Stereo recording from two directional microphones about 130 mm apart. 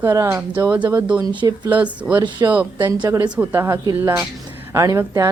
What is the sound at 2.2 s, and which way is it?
Speech, 35° right (ahead or behind).